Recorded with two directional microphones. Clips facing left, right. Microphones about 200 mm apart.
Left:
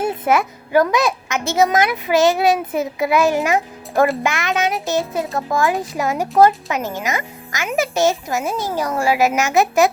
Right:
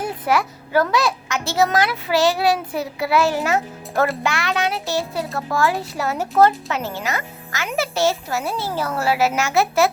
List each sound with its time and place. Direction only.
0.0 s a child's voice: 20° left (ahead or behind)